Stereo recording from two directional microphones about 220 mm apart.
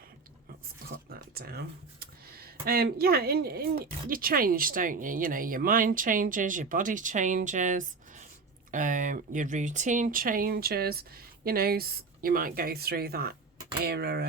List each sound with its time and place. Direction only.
0.9 s speech: 45° right (ahead or behind)